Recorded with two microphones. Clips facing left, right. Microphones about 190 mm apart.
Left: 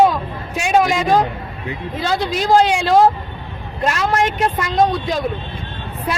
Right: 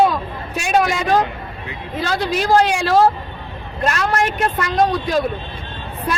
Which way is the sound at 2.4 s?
15° left (ahead or behind).